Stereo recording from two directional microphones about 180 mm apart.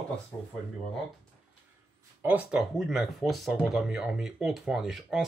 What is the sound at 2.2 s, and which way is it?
Speech, 5° right (ahead or behind).